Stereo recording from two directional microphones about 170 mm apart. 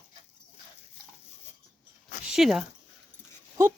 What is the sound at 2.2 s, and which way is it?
Speech, centre (ahead or behind).